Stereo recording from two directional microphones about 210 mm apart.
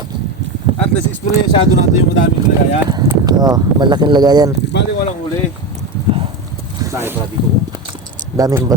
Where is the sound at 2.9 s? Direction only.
15° right (ahead or behind).